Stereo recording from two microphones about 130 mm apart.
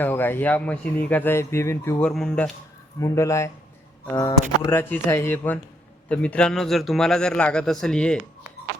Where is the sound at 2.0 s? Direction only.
5° left (ahead or behind).